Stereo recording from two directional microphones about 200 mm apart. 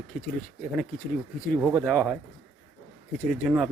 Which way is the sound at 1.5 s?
10° right (ahead or behind).